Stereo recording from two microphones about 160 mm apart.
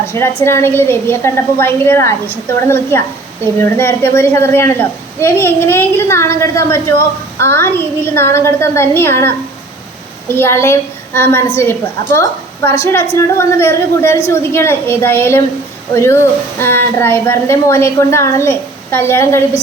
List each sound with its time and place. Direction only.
0.1 s a woman's voice: 15° left (ahead or behind)